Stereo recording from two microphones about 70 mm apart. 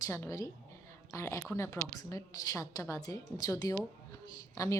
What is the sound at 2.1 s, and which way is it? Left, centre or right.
A woman's voice, left.